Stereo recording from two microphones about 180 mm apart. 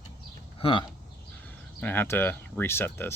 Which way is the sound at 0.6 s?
30° left (ahead or behind).